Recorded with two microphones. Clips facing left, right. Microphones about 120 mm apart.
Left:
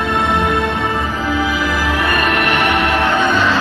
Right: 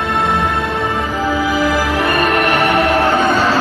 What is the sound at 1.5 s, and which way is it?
Music, 40° right (ahead or behind).